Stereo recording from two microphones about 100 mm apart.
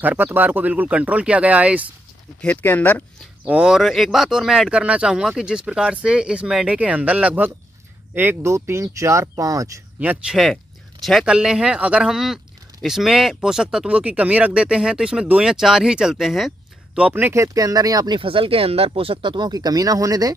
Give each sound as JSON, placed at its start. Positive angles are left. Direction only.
{"t": 0.0, "sound": "speech", "side_deg": -20}
{"t": 2.4, "sound": "speech", "side_deg": 15}
{"t": 3.4, "sound": "speech", "side_deg": -10}
{"t": 9.9, "sound": "speech", "side_deg": -10}
{"t": 10.3, "sound": "speech", "side_deg": 0}
{"t": 16.9, "sound": "speech", "side_deg": -15}
{"t": 18.2, "sound": "speech", "side_deg": -65}